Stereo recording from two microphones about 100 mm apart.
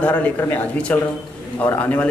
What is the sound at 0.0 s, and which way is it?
Speech, 15° left (ahead or behind).